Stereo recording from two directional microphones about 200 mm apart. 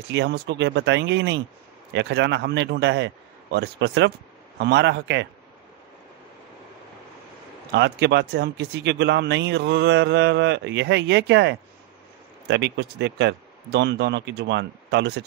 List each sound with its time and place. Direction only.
0.1 s speech: 60° right (ahead or behind)
7.7 s speech: 60° right (ahead or behind)